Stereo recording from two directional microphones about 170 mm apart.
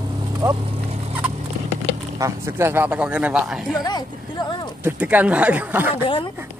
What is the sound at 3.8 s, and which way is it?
Speech, 25° left (ahead or behind).